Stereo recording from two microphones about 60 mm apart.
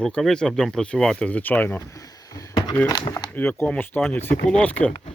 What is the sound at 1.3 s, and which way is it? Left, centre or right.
Speech, left.